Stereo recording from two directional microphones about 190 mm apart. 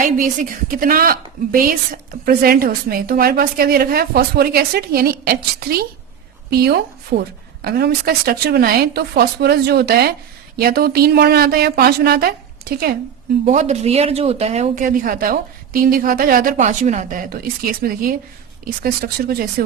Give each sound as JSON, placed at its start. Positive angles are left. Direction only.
{"t": 0.8, "sound": "speech", "side_deg": -50}
{"t": 13.4, "sound": "speech", "side_deg": -40}